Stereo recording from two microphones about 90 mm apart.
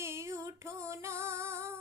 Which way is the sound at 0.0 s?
30° right (ahead or behind).